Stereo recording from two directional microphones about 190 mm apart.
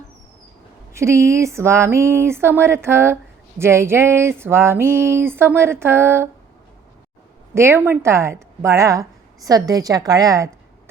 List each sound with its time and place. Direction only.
0.9 s a woman's voice: 15° right (ahead or behind)
7.5 s a woman's voice: 15° right (ahead or behind)